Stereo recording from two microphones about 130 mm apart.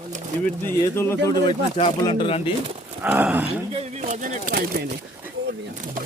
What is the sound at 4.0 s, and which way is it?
Speech, 70° right (ahead or behind).